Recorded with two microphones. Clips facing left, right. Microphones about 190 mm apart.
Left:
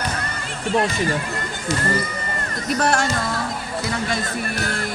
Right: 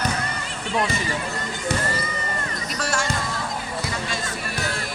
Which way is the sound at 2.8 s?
55° left (ahead or behind).